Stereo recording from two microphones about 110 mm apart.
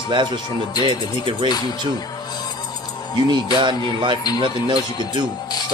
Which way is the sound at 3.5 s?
45° right (ahead or behind).